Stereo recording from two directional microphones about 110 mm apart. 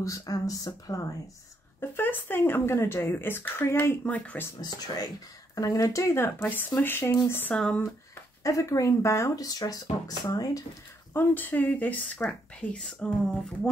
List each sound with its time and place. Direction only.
0.0 s speech: 30° left (ahead or behind)
1.8 s speech: 20° left (ahead or behind)
4.7 s speech: 35° left (ahead or behind); by 7.5 s 20° left (ahead or behind)
7.5 s speech: 5° left (ahead or behind)
8.5 s speech: 30° left (ahead or behind)
11.1 s speech: 15° left (ahead or behind)